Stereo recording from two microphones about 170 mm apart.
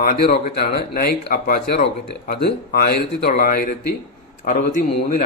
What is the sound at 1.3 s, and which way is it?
A man's voice, 55° left (ahead or behind).